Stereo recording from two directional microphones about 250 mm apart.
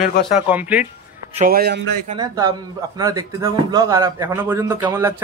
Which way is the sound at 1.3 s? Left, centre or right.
Right.